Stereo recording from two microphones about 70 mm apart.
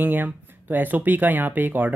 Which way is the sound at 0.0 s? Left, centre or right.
Right.